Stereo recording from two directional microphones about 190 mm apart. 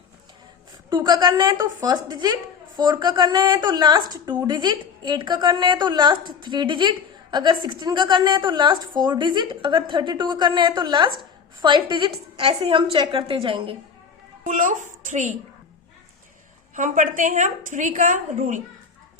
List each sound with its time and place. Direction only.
0.9 s a woman's voice: 20° right (ahead or behind)
14.4 s a child's voice: 40° right (ahead or behind)
16.7 s a woman's voice: 40° right (ahead or behind)